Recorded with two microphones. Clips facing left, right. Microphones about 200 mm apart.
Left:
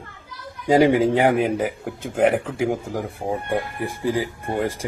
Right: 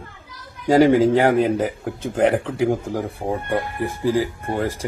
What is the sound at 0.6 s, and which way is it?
Speech, 15° left (ahead or behind).